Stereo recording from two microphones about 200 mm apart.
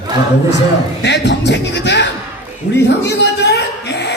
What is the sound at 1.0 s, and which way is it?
A man's voice, 60° left (ahead or behind).